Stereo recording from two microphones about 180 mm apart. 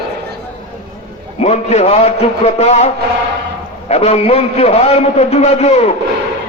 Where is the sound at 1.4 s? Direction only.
35° left (ahead or behind).